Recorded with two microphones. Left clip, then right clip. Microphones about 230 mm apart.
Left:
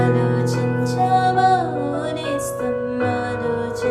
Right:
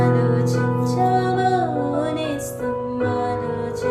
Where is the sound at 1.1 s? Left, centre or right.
Left.